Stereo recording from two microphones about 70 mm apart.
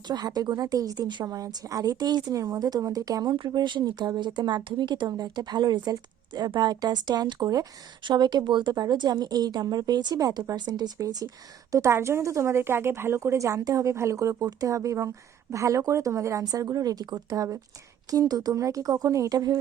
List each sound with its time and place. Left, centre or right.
0.1 s speech: right
1.2 s speech: right
2.3 s speech: right
8.1 s speech: right
10.9 s speech: right
11.7 s a woman's voice: right
16.4 s speech: right